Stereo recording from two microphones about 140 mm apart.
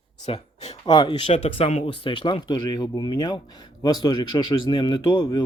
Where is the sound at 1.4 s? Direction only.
45° left (ahead or behind).